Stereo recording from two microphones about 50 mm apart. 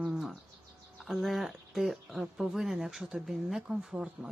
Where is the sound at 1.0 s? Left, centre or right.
Centre.